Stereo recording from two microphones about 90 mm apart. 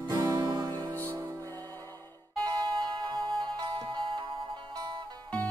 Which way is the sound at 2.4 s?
55° right (ahead or behind).